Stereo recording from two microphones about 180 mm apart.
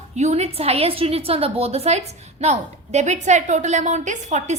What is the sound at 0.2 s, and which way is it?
A woman's voice, 40° right (ahead or behind).